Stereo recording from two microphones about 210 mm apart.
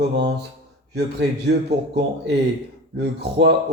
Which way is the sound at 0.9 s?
55° right (ahead or behind).